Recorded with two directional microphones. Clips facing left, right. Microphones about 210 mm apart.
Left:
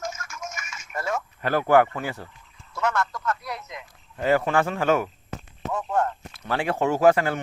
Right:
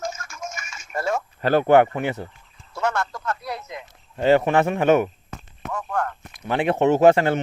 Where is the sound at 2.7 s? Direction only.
30° right (ahead or behind).